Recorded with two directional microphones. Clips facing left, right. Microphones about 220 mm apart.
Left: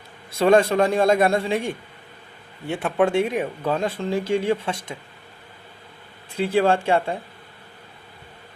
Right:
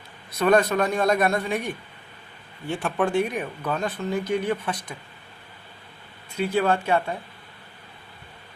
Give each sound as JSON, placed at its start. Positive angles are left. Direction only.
{"t": 0.3, "sound": "speech", "side_deg": 25}
{"t": 6.3, "sound": "speech", "side_deg": 30}